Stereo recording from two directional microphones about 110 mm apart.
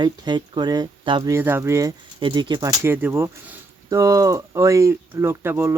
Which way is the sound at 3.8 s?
30° right (ahead or behind).